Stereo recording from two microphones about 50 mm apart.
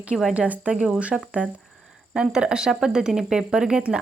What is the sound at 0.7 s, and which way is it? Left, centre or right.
Speech, centre.